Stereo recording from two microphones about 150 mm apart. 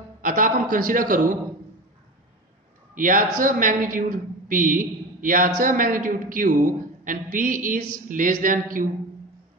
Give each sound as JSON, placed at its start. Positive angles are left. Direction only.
{"t": 0.2, "sound": "a man's voice", "side_deg": -65}
{"t": 2.9, "sound": "a man's voice", "side_deg": -65}